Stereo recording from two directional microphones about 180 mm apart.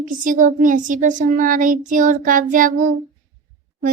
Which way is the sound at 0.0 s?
45° right (ahead or behind).